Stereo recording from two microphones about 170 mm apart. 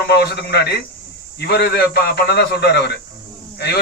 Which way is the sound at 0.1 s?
75° left (ahead or behind).